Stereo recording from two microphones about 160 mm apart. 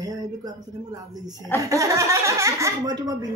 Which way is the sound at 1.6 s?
20° right (ahead or behind).